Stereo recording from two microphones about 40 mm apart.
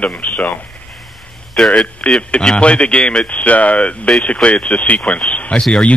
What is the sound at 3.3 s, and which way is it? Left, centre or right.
A man's voice, left.